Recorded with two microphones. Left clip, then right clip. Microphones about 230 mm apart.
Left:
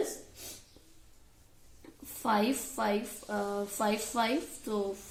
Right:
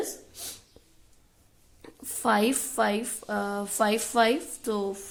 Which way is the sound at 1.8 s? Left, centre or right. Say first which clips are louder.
Right 7 dB; right.